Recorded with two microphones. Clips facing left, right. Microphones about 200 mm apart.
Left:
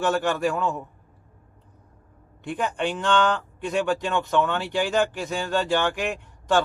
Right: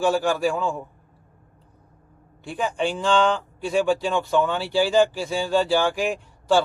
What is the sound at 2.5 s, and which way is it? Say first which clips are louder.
A man's voice: right 1 dB; 10° right (ahead or behind).